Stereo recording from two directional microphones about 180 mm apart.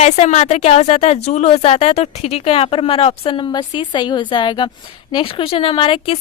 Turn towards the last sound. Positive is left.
turn(degrees=30)  # may be behind; listen again after turning